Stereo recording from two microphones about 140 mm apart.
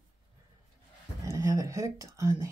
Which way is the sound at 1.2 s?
20° right (ahead or behind).